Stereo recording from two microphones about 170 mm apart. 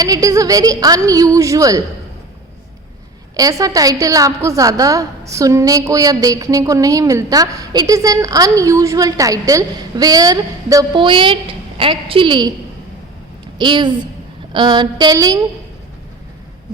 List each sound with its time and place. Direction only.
0.0 s a woman's voice: 20° right (ahead or behind)
3.3 s a woman's voice: 20° right (ahead or behind)
13.6 s a woman's voice: 25° right (ahead or behind)